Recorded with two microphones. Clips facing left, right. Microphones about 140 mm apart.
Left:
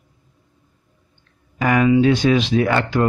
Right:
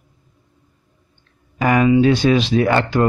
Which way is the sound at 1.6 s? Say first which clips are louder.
Right 1 dB; 30° right (ahead or behind).